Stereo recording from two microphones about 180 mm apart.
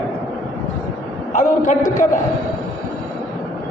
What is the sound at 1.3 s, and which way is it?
Speech, 50° left (ahead or behind).